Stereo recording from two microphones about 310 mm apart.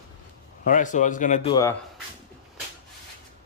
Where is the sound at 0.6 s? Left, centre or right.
Left.